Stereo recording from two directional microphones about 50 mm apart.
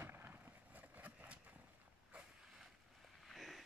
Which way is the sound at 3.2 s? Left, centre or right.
Centre.